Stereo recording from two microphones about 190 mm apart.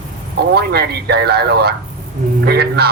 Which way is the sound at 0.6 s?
60° right (ahead or behind).